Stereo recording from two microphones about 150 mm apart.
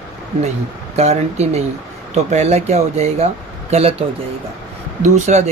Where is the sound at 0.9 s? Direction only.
45° right (ahead or behind).